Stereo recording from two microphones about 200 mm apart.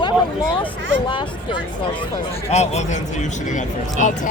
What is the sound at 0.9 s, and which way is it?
A man's voice, 25° left (ahead or behind).